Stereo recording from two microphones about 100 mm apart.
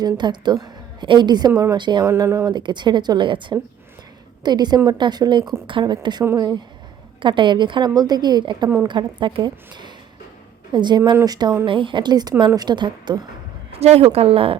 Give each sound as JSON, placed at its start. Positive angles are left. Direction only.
{"t": 0.0, "sound": "a woman's voice", "side_deg": -45}
{"t": 2.0, "sound": "speech", "side_deg": -25}
{"t": 2.5, "sound": "a woman's voice", "side_deg": -50}
{"t": 11.6, "sound": "a woman's voice", "side_deg": -55}
{"t": 13.7, "sound": "a woman's voice", "side_deg": -90}